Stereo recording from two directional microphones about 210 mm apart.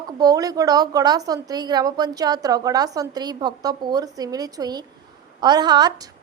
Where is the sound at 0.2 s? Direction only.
15° right (ahead or behind).